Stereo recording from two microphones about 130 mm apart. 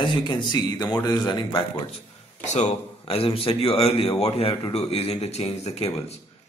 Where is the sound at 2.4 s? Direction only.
60° left (ahead or behind).